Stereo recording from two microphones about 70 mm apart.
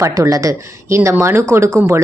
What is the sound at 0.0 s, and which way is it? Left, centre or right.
Speech, right.